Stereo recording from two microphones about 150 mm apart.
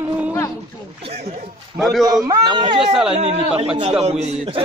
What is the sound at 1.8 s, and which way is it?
Speech, centre (ahead or behind).